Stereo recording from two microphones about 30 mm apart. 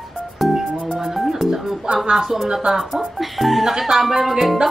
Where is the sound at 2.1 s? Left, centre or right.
Centre.